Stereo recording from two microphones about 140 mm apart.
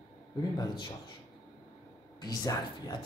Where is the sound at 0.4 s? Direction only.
30° left (ahead or behind).